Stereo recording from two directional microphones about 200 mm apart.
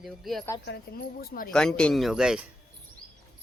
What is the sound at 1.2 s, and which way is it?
Speech, 45° left (ahead or behind).